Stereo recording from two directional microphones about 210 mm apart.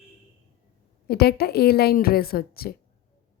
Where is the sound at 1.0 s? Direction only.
50° left (ahead or behind).